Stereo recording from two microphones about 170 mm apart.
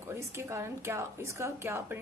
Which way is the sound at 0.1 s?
15° right (ahead or behind).